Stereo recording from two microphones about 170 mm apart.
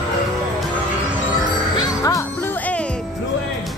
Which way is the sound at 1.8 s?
20° left (ahead or behind).